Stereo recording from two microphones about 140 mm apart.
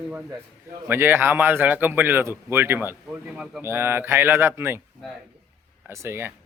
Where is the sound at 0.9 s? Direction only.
15° right (ahead or behind).